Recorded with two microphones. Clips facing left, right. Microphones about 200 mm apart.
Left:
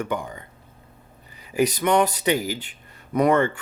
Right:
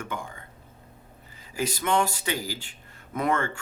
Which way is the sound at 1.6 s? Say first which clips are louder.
Left 6 dB; 20° left (ahead or behind).